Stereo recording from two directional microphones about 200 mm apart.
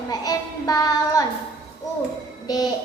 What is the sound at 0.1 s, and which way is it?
Child singing, 20° left (ahead or behind).